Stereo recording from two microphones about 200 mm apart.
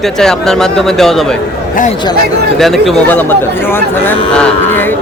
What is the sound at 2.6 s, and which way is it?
Speech, centre (ahead or behind).